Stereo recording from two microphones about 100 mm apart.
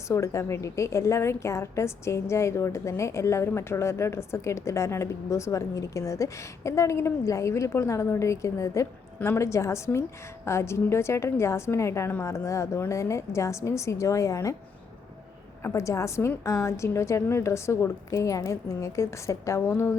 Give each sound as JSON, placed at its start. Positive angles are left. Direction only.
{"t": 0.1, "sound": "a woman's voice", "side_deg": 30}
{"t": 15.6, "sound": "a woman's voice", "side_deg": 30}